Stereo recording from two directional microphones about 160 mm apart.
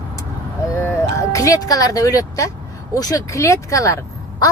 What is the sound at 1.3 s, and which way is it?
Speech, 20° left (ahead or behind).